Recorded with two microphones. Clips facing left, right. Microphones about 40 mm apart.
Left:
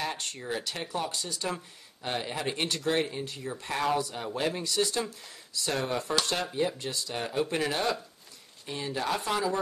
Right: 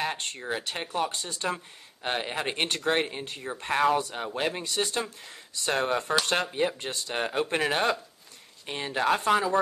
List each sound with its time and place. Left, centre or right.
0.0 s speech: right